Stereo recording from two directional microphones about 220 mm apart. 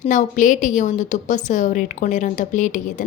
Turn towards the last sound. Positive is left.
turn(degrees=35)  # may be behind; listen again after turning